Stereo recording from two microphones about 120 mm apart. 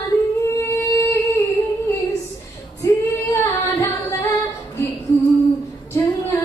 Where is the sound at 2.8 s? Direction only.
30° left (ahead or behind).